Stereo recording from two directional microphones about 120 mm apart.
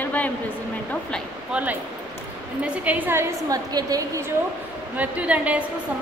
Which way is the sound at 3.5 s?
30° right (ahead or behind).